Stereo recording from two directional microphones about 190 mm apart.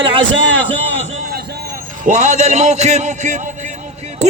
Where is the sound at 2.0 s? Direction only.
40° right (ahead or behind).